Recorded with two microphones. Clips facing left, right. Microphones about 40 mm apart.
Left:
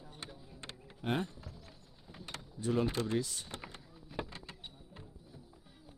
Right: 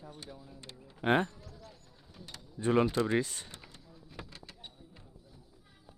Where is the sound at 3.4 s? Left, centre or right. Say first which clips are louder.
Left 5 dB; left.